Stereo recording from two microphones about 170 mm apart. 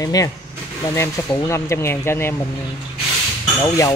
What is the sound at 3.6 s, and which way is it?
Speech, 20° left (ahead or behind).